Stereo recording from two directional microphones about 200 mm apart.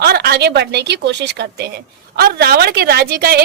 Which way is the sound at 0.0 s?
50° right (ahead or behind).